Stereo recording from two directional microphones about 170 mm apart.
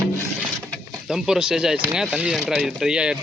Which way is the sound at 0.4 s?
Centre (ahead or behind).